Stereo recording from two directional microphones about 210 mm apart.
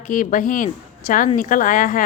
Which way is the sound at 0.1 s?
40° left (ahead or behind).